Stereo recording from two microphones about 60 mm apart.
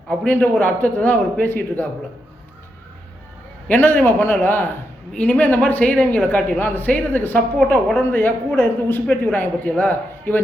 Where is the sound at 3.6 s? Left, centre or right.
Left.